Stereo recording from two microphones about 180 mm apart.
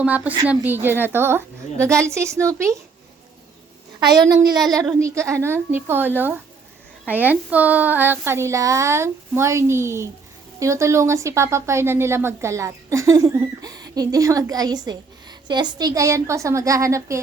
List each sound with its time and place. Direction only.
0.0 s a woman's voice: 10° right (ahead or behind)
4.9 s a woman's voice: 15° right (ahead or behind)